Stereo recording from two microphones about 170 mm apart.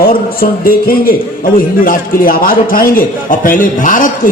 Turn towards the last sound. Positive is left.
turn(degrees=50)  # may be behind; listen again after turning